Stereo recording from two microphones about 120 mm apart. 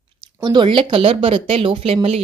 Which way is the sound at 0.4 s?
40° right (ahead or behind).